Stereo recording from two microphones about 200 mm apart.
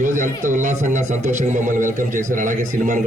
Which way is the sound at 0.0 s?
40° right (ahead or behind).